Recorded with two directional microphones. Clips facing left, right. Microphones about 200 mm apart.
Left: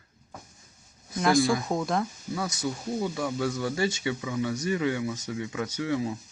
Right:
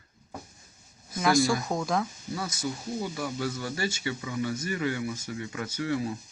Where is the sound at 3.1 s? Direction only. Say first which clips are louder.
Left 3 dB; 5° right (ahead or behind).